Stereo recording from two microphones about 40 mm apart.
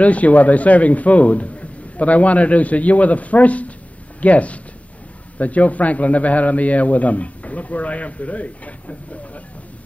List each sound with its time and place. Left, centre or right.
0.0 s a man's voice: left